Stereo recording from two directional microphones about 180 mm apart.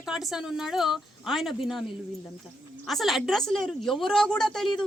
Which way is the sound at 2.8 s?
Centre (ahead or behind).